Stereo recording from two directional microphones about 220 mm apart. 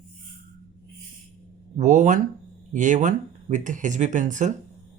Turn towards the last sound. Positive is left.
turn(degrees=-35)  # may be behind; listen again after turning